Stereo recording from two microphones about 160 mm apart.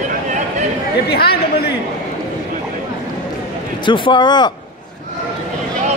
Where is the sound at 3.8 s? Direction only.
30° left (ahead or behind).